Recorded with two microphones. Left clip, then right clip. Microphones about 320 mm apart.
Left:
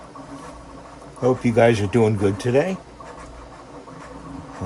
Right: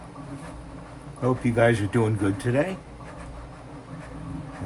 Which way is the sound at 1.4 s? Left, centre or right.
Left.